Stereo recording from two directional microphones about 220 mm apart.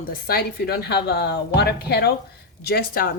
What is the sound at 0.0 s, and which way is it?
Speech, 40° left (ahead or behind).